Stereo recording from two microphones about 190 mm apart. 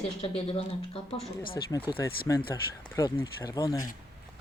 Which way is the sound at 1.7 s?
20° left (ahead or behind).